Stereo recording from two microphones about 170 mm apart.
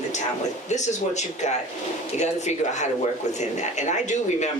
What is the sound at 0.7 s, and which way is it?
Speech, 45° left (ahead or behind).